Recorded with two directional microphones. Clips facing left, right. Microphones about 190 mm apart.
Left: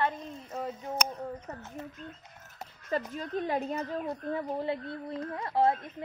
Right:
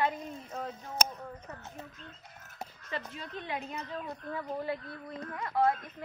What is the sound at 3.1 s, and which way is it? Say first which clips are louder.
A woman's voice: left 7 dB; 45° left (ahead or behind).